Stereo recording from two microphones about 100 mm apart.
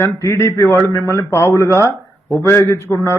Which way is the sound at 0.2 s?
30° left (ahead or behind).